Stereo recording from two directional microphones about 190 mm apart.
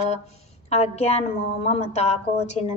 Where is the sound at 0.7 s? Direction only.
35° left (ahead or behind).